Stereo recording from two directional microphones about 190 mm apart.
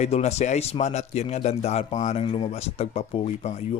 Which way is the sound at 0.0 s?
35° left (ahead or behind).